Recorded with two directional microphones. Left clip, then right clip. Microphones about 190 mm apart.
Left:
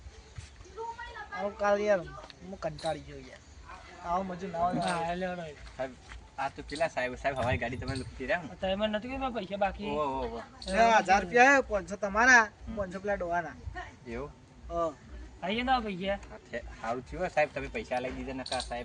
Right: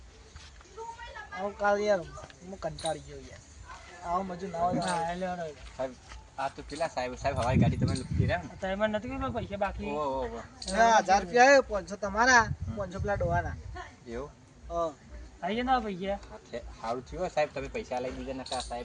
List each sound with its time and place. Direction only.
0.8 s a sound: 55° right (ahead or behind)
1.5 s speech: 10° right (ahead or behind)
4.0 s speech: 10° right (ahead or behind)
4.8 s speech: 10° left (ahead or behind)
5.1 s speech: 45° left (ahead or behind)
6.3 s speech: 5° right (ahead or behind)
8.6 s speech: 15° left (ahead or behind)
10.1 s speech: 15° right (ahead or behind)
10.7 s speech: centre (ahead or behind)
14.7 s speech: centre (ahead or behind)
15.4 s speech: 10° left (ahead or behind)
16.5 s speech: 10° right (ahead or behind)